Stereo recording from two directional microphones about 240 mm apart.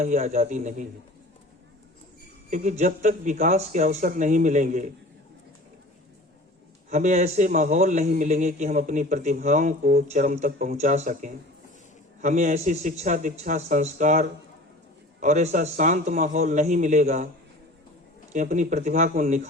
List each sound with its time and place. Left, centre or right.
0.0 s a man's voice: right
2.5 s a man's voice: right
6.9 s a man's voice: right
18.3 s a man's voice: right